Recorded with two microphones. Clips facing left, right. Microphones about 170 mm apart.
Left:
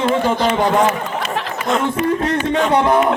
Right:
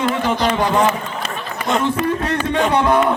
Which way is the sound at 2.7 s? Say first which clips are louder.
Left 1 dB; 25° left (ahead or behind).